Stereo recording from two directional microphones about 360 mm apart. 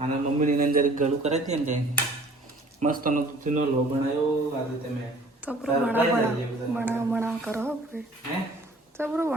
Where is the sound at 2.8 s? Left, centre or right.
Right.